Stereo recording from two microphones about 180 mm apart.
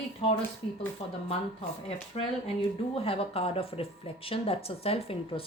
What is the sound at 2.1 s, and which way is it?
A woman's voice, 30° left (ahead or behind).